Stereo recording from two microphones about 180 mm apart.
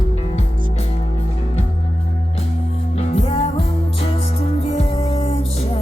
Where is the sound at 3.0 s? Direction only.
35° left (ahead or behind).